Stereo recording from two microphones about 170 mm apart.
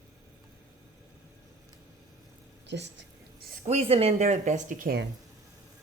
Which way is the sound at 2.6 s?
90° right.